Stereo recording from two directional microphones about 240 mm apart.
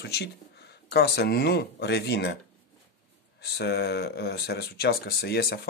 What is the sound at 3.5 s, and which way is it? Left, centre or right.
Speech, left.